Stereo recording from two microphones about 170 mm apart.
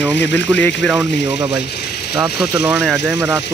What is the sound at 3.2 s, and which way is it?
Speech, 15° right (ahead or behind).